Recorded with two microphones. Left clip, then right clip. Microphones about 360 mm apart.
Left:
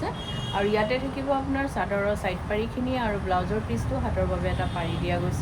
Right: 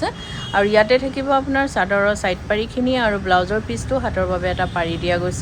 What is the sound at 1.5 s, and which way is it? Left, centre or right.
Speech, right.